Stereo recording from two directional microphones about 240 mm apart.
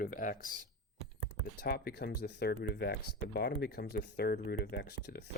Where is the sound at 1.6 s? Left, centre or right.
Left.